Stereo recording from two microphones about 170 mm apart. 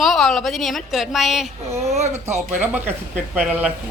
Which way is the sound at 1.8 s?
40° right (ahead or behind).